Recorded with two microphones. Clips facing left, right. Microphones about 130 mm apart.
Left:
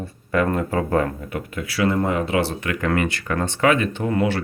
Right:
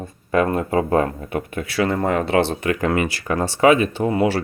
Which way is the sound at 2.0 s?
45° right (ahead or behind).